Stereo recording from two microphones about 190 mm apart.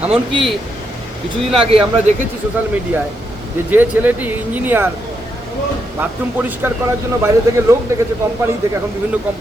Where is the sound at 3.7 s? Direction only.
10° right (ahead or behind).